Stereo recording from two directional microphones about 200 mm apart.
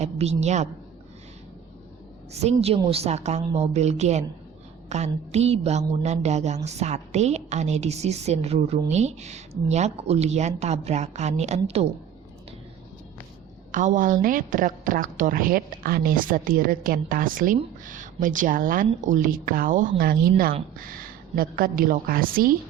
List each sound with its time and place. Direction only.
0.0 s a woman's voice: 35° right (ahead or behind)
2.3 s a woman's voice: 30° right (ahead or behind)
13.7 s a woman's voice: 40° right (ahead or behind)